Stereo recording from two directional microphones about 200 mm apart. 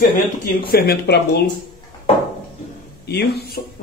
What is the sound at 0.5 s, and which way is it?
Speech, 50° left (ahead or behind).